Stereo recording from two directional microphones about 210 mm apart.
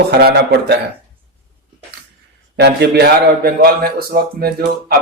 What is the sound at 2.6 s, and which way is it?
A man's voice, 50° right (ahead or behind).